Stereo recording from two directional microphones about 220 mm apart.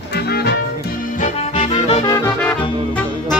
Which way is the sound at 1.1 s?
30° left (ahead or behind).